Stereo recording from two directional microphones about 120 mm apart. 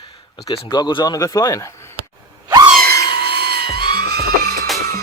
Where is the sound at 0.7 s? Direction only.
40° left (ahead or behind).